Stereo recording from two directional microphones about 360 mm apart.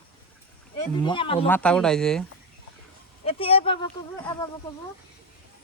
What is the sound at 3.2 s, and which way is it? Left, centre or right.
Speech, centre.